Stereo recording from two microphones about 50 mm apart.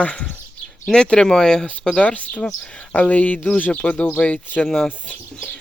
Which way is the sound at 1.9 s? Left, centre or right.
Left.